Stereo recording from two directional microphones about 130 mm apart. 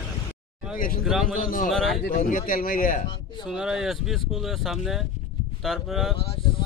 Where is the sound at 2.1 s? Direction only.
90° left.